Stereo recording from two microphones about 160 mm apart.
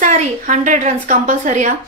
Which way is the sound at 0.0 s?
50° right (ahead or behind).